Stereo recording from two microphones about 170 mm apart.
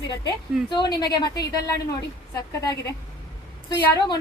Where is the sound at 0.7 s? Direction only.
25° left (ahead or behind).